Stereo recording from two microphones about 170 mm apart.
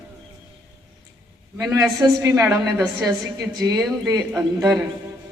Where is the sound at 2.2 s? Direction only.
15° right (ahead or behind).